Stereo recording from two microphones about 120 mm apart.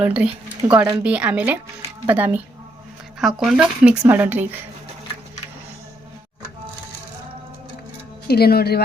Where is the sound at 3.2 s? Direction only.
Centre (ahead or behind).